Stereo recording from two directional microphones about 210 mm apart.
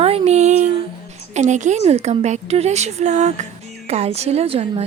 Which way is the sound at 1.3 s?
35° right (ahead or behind).